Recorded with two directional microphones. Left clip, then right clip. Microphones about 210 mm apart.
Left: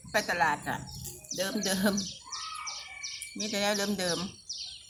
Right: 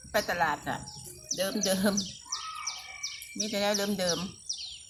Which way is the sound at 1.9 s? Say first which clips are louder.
Right 2 dB; 55° right (ahead or behind).